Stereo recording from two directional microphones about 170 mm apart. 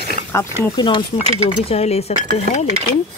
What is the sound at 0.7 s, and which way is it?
Speech, 25° left (ahead or behind).